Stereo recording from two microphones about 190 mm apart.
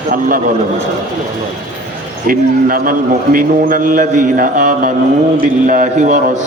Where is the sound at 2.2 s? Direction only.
50° right (ahead or behind).